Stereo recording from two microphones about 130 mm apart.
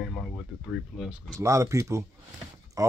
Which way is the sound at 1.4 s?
25° right (ahead or behind).